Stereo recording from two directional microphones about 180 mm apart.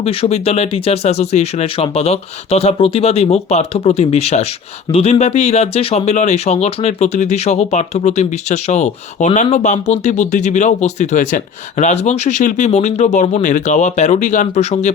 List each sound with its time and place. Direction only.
0.0 s speech: 35° left (ahead or behind)